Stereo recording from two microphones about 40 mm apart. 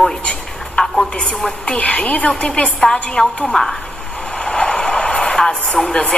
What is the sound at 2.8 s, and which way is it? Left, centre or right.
Speech, centre.